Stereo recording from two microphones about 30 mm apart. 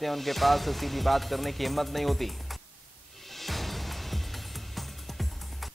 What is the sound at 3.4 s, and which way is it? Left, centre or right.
Music, centre.